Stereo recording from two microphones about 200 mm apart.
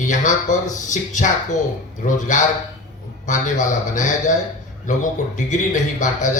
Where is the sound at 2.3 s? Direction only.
40° left (ahead or behind).